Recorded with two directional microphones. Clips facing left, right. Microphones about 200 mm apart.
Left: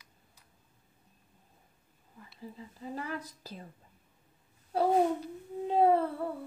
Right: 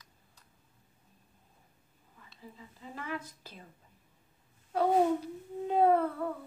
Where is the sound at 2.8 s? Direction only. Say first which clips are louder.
Left 2 dB; 35° left (ahead or behind).